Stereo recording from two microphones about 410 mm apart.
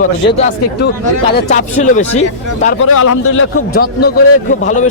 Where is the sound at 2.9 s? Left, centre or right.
Left.